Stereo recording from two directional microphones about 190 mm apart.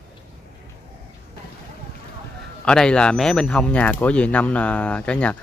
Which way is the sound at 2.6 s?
5° left (ahead or behind).